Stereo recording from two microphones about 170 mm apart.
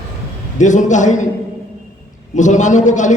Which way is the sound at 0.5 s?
45° left (ahead or behind).